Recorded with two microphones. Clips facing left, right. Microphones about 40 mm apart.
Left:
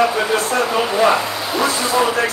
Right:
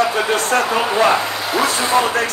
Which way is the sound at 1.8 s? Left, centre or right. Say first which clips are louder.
Right 2 dB; right.